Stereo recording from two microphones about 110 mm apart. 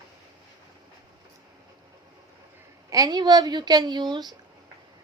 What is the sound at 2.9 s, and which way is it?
A woman's voice, 35° right (ahead or behind).